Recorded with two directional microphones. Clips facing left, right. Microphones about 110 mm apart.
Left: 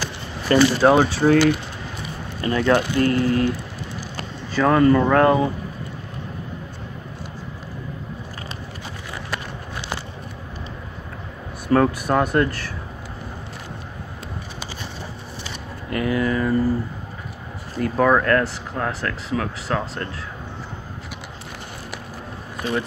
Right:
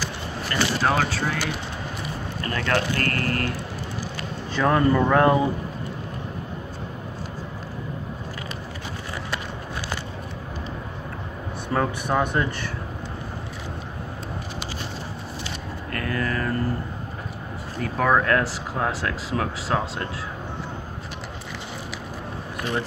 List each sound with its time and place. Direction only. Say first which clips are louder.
0.5 s speech: left 9 dB; 20° left (ahead or behind)
2.4 s speech: left 6 dB; 15° left (ahead or behind)
4.6 s speech: left 4 dB; centre (ahead or behind)
11.7 s speech: left 6 dB; centre (ahead or behind)
15.9 s speech: left 6 dB; 15° left (ahead or behind)
17.7 s speech: left 3 dB; centre (ahead or behind)
18.2 s speech: left 3 dB; 10° right (ahead or behind)